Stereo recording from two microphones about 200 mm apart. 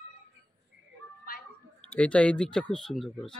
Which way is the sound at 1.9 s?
5° left (ahead or behind).